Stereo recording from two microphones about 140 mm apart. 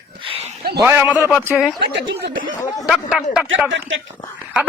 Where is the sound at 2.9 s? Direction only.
5° right (ahead or behind).